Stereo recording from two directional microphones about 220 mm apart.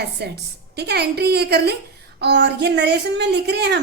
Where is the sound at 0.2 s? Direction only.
50° right (ahead or behind).